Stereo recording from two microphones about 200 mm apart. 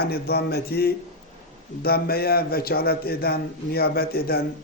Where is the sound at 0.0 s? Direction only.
50° left (ahead or behind).